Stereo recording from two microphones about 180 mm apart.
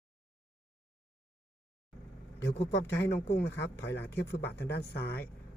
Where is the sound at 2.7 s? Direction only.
85° left.